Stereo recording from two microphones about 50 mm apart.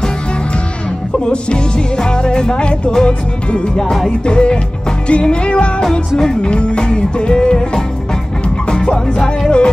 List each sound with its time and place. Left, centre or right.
1.2 s music: centre